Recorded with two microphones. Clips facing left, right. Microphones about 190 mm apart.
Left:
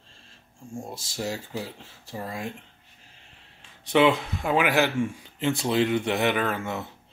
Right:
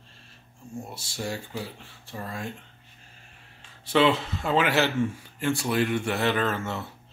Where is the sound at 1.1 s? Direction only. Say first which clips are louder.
Left 1 dB; 20° left (ahead or behind).